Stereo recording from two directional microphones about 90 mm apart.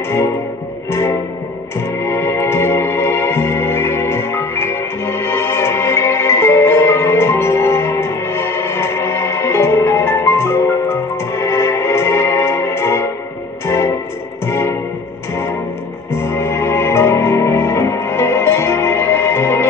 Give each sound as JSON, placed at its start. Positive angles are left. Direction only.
{"t": 2.0, "sound": "music", "side_deg": 30}
{"t": 16.2, "sound": "music", "side_deg": 30}